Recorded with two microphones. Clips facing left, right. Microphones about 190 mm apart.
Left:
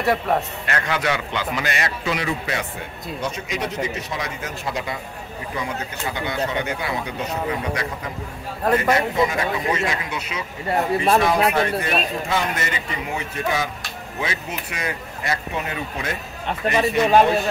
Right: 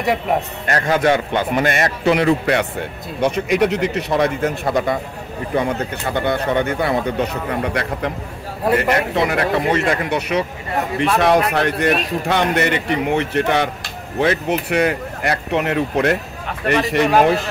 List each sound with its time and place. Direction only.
0.0 s a man's voice: 15° right (ahead or behind)
0.7 s a man's voice: 40° right (ahead or behind); by 17.5 s 90° right